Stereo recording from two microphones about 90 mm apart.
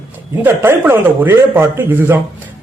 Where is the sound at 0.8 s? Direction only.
25° right (ahead or behind).